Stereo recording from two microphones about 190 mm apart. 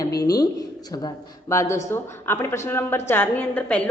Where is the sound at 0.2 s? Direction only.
20° left (ahead or behind).